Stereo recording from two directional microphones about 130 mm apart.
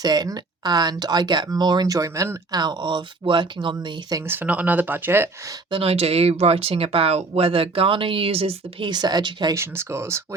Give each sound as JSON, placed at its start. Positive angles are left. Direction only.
{"t": 0.0, "sound": "speech", "side_deg": -30}
{"t": 4.2, "sound": "speech", "side_deg": -15}
{"t": 5.7, "sound": "speech", "side_deg": -50}
{"t": 9.6, "sound": "speech", "side_deg": -20}